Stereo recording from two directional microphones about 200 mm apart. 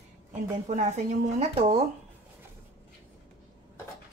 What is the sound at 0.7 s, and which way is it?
Speech, 35° right (ahead or behind).